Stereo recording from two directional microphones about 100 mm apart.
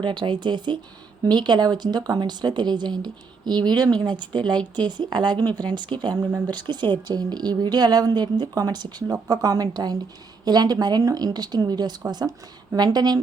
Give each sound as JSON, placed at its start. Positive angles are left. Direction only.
{"t": 0.0, "sound": "a woman's voice", "side_deg": -50}